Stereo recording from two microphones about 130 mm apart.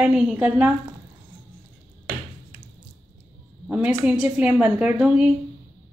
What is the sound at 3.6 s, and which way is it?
A woman's voice, 10° right (ahead or behind).